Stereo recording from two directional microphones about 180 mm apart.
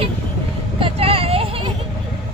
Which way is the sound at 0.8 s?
30° right (ahead or behind).